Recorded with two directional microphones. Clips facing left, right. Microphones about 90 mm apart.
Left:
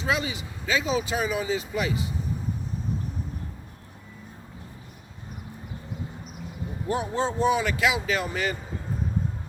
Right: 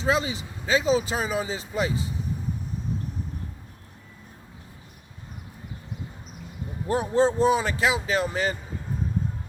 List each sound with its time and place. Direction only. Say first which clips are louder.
0.0 s speech: right 3 dB; 30° right (ahead or behind)
6.8 s speech: right 5 dB; 35° right (ahead or behind)